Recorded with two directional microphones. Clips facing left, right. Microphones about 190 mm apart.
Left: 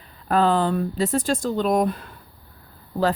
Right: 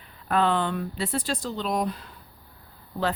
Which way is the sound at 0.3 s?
35° left (ahead or behind).